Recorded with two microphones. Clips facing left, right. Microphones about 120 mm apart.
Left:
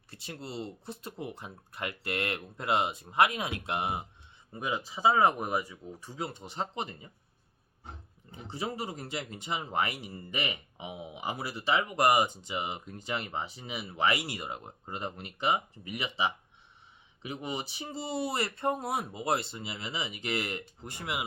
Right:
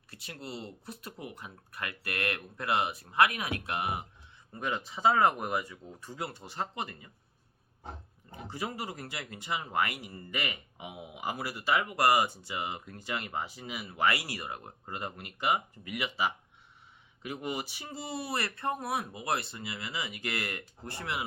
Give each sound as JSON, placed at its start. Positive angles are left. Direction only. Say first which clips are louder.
{"t": 0.1, "sound": "speech", "louder": "left 1 dB", "side_deg": 25}
{"t": 4.5, "sound": "speech", "louder": "left 1 dB", "side_deg": 10}
{"t": 5.1, "sound": "speech", "louder": "left 1 dB", "side_deg": 20}
{"t": 8.5, "sound": "speech", "louder": "left 2 dB", "side_deg": 25}
{"t": 17.6, "sound": "speech", "louder": "left 2 dB", "side_deg": 25}